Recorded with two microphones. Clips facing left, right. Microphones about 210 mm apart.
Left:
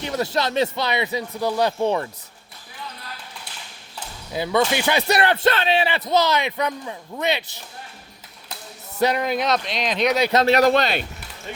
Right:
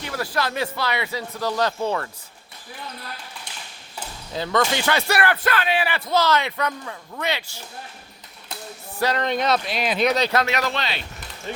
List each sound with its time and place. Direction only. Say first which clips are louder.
0.0 s speech: left 3 dB; 25° left (ahead or behind)
4.3 s speech: left 2 dB; 10° left (ahead or behind)
9.0 s speech: left 2 dB; 15° left (ahead or behind); by 10.2 s 5° right (ahead or behind)
10.3 s speech: left 7 dB; 35° left (ahead or behind)